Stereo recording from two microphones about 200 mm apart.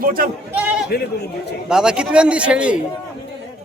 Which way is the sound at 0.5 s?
5° right (ahead or behind).